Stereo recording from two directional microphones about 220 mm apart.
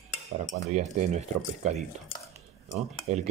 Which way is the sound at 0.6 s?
30° right (ahead or behind).